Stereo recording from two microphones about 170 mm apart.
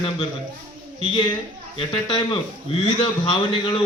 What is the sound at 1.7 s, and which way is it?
A man's voice, 30° left (ahead or behind).